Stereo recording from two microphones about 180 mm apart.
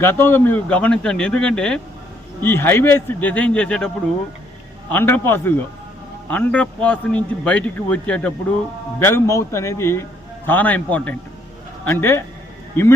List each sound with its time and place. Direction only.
0.0 s a man's voice: 10° left (ahead or behind)